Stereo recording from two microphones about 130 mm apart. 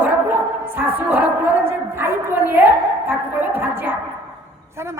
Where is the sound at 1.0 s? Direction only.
10° right (ahead or behind).